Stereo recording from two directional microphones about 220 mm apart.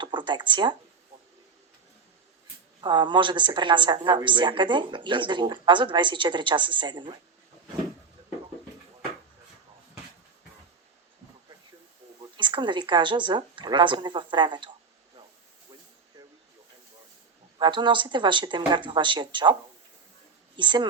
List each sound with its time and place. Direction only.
0.0 s speech: 20° right (ahead or behind)
2.8 s speech: 20° right (ahead or behind)
12.4 s speech: 20° right (ahead or behind)
17.6 s speech: 20° right (ahead or behind)
20.6 s speech: 20° right (ahead or behind)